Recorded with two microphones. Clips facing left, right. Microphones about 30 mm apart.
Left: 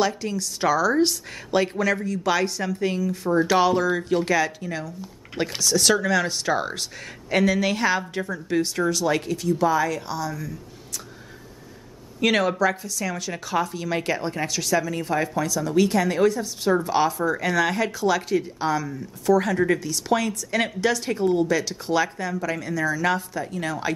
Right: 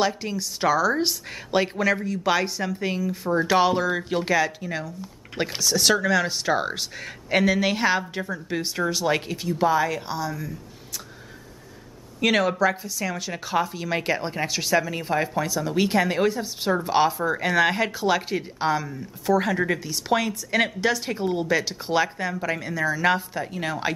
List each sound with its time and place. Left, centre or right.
0.0 s speech: centre
12.2 s speech: centre; by 23.9 s right